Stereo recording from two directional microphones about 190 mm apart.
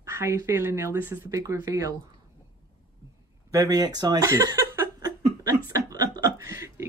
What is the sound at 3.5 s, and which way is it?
Speech, 20° right (ahead or behind).